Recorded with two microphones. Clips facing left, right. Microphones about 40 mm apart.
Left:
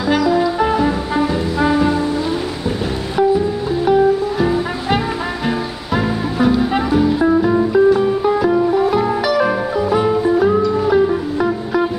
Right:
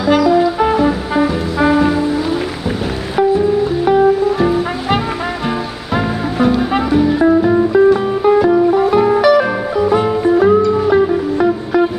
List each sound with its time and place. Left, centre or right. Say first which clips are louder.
0.1 s music: right 4 dB; centre
3.2 s music: right 3 dB; centre